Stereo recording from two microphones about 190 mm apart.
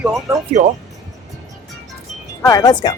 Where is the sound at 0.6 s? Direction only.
45° right (ahead or behind).